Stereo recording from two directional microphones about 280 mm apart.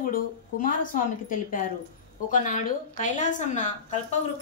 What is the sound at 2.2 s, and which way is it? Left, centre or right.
A woman's voice, left.